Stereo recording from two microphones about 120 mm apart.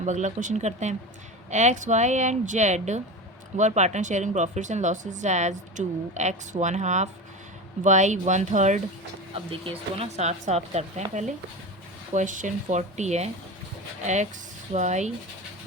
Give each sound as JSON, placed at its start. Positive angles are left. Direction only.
{"t": 0.0, "sound": "speech", "side_deg": -90}
{"t": 9.3, "sound": "speech", "side_deg": -50}
{"t": 14.7, "sound": "speech", "side_deg": -75}